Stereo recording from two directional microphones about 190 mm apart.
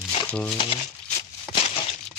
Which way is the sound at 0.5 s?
30° left (ahead or behind).